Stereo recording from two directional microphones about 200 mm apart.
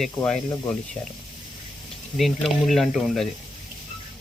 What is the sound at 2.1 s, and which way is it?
Speech, centre (ahead or behind).